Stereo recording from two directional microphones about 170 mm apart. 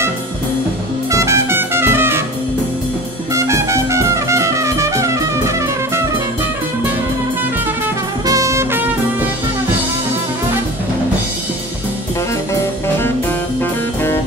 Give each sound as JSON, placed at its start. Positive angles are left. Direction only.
{"t": 1.1, "sound": "music", "side_deg": -15}
{"t": 3.3, "sound": "music", "side_deg": -15}
{"t": 8.3, "sound": "music", "side_deg": -20}